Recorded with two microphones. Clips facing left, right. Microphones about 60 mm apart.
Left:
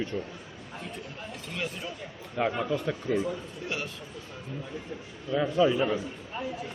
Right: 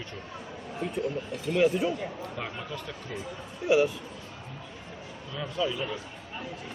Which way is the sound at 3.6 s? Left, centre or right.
Centre.